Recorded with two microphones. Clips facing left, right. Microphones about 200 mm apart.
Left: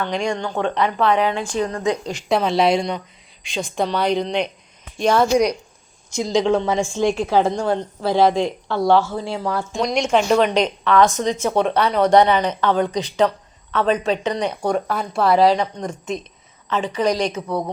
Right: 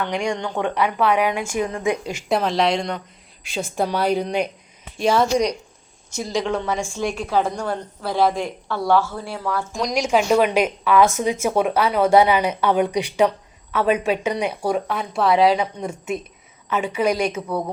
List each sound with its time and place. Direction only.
0.0 s a woman's voice: 15° right (ahead or behind); by 6.4 s 15° left (ahead or behind)
6.4 s a woman's voice: 25° left (ahead or behind)
9.7 s a woman's voice: centre (ahead or behind)